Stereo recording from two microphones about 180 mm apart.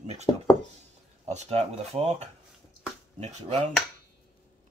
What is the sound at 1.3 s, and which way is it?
Speech, 35° right (ahead or behind).